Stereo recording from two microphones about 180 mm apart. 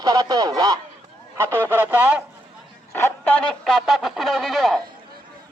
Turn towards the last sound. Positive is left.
turn(degrees=0)  # may be behind; listen again after turning